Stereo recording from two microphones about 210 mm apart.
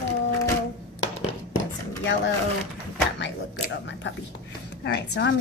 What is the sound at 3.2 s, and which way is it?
A woman's voice, 60° left (ahead or behind).